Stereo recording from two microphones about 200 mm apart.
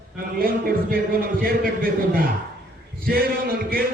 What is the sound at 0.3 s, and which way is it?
A man's voice, 45° right (ahead or behind).